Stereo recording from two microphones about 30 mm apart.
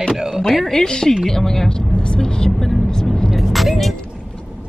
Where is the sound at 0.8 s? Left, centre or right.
Left.